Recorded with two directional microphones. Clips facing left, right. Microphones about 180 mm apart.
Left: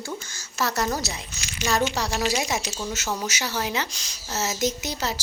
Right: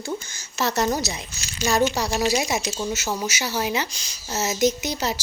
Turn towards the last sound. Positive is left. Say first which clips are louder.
# right 4 dB
turn(degrees=-15)  # may be behind; listen again after turning